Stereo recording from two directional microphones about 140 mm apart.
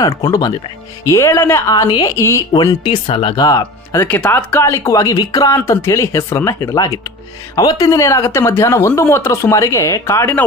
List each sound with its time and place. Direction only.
0.0 s speech: 30° left (ahead or behind)
2.8 s speech: 40° left (ahead or behind)
3.4 s speech: 20° left (ahead or behind)